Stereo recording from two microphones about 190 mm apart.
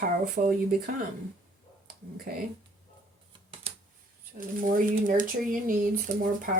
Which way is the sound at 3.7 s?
30° right (ahead or behind).